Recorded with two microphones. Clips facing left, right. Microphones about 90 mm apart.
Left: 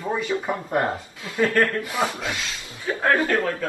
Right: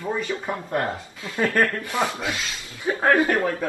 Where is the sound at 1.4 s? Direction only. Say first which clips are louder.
Left 1 dB; 20° right (ahead or behind).